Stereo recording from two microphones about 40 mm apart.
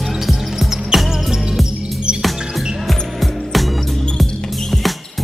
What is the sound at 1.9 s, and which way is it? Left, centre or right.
Music, right.